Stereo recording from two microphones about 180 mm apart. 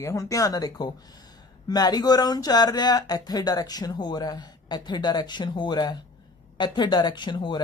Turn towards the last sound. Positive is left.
turn(degrees=25)  # may be behind; listen again after turning